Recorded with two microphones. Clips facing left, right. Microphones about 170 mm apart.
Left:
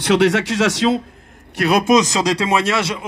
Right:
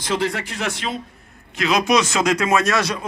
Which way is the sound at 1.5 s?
55° left (ahead or behind).